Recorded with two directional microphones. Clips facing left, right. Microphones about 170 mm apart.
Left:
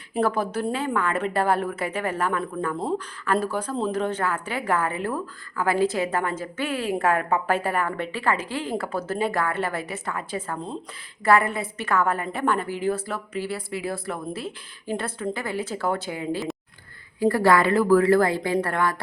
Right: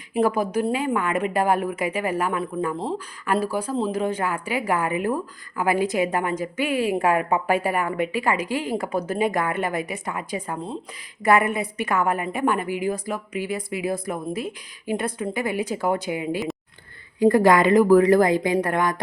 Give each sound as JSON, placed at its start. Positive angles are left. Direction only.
{"t": 0.1, "sound": "a woman's voice", "side_deg": -10}